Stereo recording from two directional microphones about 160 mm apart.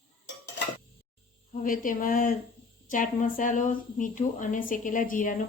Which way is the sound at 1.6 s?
60° left (ahead or behind).